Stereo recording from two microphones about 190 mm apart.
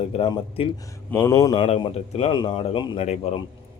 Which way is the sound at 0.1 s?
30° left (ahead or behind).